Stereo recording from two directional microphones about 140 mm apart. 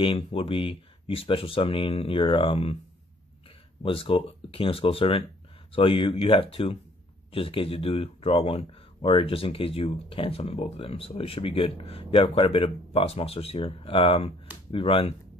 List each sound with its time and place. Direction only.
0.0 s speech: 40° left (ahead or behind)
3.8 s speech: 40° left (ahead or behind)